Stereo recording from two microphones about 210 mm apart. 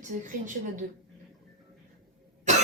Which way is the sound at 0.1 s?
40° right (ahead or behind).